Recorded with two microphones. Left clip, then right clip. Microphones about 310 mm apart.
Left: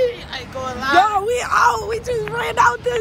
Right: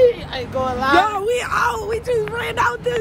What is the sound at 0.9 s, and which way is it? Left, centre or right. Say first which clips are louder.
Speech: left 3 dB; centre.